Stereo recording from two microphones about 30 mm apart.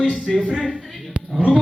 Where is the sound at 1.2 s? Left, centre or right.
Right.